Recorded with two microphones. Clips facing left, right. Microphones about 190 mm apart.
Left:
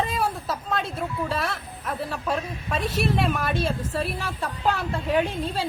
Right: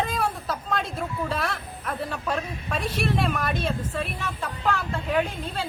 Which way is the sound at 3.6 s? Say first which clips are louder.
Left 2 dB; 35° left (ahead or behind).